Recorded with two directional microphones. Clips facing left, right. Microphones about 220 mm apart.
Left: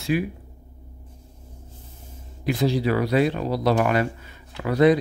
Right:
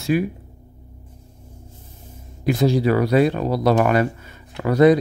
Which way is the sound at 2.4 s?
45° right (ahead or behind).